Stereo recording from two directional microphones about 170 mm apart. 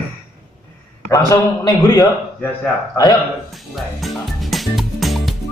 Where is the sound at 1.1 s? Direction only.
20° left (ahead or behind).